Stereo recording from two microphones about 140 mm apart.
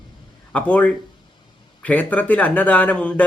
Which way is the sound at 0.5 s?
10° left (ahead or behind).